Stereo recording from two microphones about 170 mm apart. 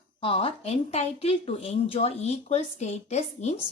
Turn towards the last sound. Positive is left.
turn(degrees=40)  # may be behind; listen again after turning